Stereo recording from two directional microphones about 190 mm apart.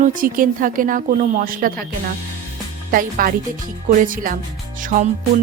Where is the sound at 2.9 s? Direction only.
45° right (ahead or behind).